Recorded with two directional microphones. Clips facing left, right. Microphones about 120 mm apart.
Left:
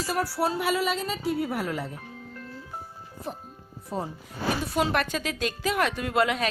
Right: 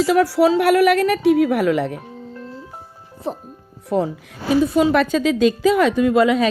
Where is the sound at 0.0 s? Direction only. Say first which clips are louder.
Right 12 dB; 90° right.